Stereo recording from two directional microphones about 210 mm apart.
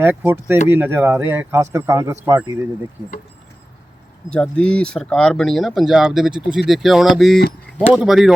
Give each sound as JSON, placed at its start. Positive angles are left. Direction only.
{"t": 0.0, "sound": "speech", "side_deg": -10}
{"t": 4.3, "sound": "speech", "side_deg": 5}